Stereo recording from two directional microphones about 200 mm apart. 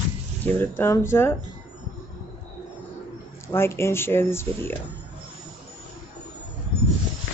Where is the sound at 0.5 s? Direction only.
10° left (ahead or behind).